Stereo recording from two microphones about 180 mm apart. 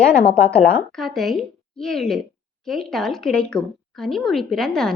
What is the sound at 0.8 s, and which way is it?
A woman's voice, centre (ahead or behind).